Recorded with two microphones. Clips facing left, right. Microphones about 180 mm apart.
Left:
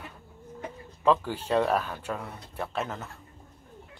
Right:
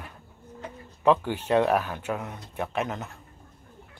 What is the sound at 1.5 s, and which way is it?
Speech, 10° right (ahead or behind).